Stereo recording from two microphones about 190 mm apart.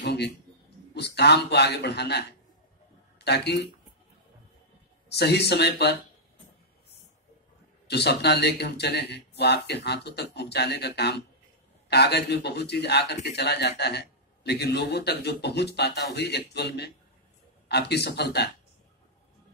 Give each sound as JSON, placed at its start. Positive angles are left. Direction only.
{"t": 0.0, "sound": "a sound", "side_deg": 60}
{"t": 0.9, "sound": "speech", "side_deg": 60}
{"t": 3.3, "sound": "speech", "side_deg": 60}
{"t": 5.1, "sound": "speech", "side_deg": 60}
{"t": 7.9, "sound": "speech", "side_deg": 60}